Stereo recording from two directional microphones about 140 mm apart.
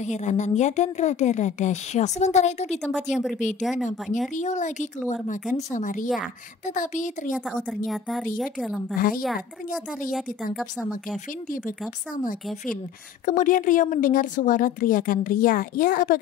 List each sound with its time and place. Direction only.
0.0 s speech: 55° left (ahead or behind)
7.4 s a woman's voice: centre (ahead or behind)
10.5 s a woman's voice: centre (ahead or behind)
13.2 s a woman's voice: 70° left (ahead or behind)